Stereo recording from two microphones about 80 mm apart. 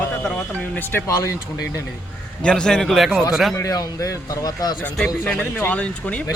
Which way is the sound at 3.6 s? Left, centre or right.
Left.